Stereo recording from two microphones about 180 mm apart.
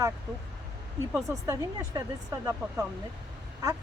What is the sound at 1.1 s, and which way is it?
Speech, 20° right (ahead or behind).